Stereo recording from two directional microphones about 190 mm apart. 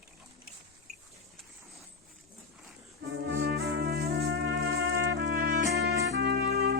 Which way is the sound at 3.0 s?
55° right (ahead or behind).